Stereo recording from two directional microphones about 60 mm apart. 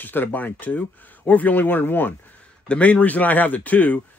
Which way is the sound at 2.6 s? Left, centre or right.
Left.